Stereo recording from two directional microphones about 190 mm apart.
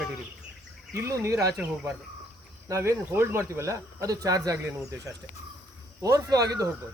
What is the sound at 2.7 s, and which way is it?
Speech, 15° right (ahead or behind).